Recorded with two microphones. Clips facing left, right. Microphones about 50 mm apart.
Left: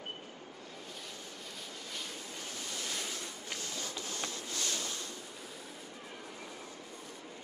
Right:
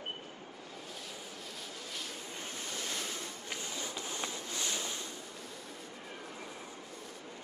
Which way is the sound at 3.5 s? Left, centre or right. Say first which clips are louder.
Right 1 dB; centre.